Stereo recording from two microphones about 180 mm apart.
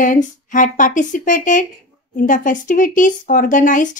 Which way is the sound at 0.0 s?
45° left (ahead or behind).